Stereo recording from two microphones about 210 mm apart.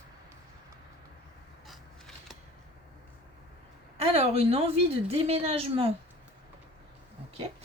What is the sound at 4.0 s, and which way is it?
A woman's voice, 30° right (ahead or behind).